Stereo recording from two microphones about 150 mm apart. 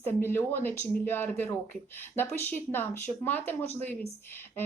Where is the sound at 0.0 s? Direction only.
15° left (ahead or behind).